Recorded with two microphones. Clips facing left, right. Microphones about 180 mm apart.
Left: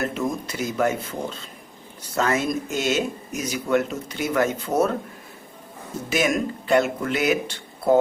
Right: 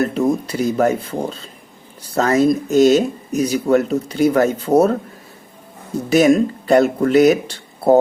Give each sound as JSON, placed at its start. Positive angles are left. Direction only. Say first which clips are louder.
{"t": 0.0, "sound": "speech", "louder": "right 8 dB", "side_deg": -35}
{"t": 6.1, "sound": "speech", "louder": "right 10 dB", "side_deg": -35}